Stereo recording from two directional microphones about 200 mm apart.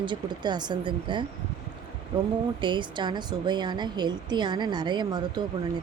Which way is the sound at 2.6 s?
25° right (ahead or behind).